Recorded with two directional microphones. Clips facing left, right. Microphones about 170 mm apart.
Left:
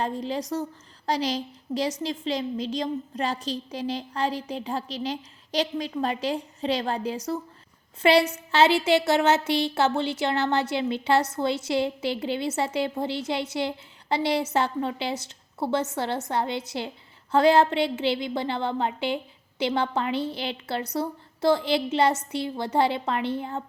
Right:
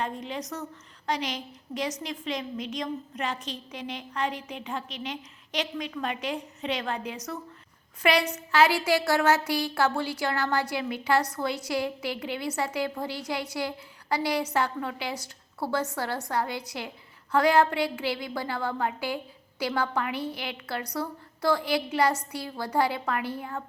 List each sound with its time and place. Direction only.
0.0 s a woman's voice: 35° left (ahead or behind)